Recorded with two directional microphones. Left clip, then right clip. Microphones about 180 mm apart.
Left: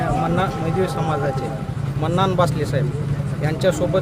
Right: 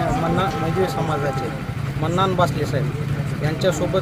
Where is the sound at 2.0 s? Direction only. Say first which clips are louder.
Even; 15° left (ahead or behind).